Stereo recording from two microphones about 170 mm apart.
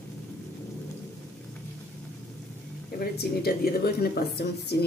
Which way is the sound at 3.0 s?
65° left (ahead or behind).